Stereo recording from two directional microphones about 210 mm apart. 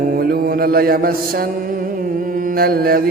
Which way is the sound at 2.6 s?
45° right (ahead or behind).